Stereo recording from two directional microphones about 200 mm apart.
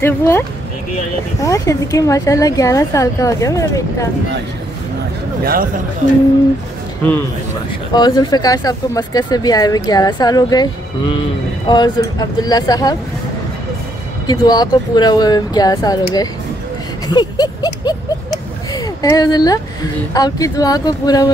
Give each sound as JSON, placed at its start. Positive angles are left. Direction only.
{"t": 0.0, "sound": "a woman's voice", "side_deg": 10}
{"t": 5.4, "sound": "speech", "side_deg": -45}
{"t": 7.0, "sound": "a woman's voice", "side_deg": 10}
{"t": 7.9, "sound": "speech", "side_deg": 20}
{"t": 14.2, "sound": "speech", "side_deg": 20}
{"t": 17.1, "sound": "a sound", "side_deg": 20}
{"t": 18.7, "sound": "speech", "side_deg": 20}